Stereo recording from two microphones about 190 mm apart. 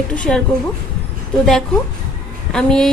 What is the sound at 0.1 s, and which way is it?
Speech, 5° left (ahead or behind).